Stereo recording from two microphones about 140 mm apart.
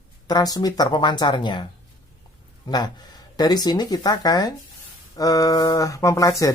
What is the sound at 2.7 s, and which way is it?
Speech, 30° left (ahead or behind).